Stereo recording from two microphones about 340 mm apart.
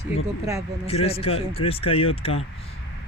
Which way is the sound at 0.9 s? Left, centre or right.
Centre.